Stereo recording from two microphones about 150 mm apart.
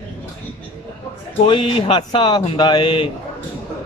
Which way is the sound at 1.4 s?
35° left (ahead or behind).